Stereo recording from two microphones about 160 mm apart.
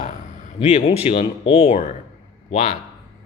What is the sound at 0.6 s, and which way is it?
A man's voice, 40° left (ahead or behind).